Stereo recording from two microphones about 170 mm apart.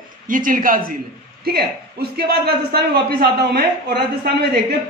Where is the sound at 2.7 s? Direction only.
65° right (ahead or behind).